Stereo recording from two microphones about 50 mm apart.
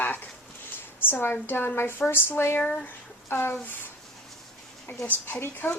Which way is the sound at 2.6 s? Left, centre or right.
Left.